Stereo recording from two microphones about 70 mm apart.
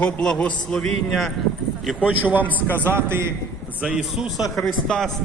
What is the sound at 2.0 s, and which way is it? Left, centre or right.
A man's voice, right.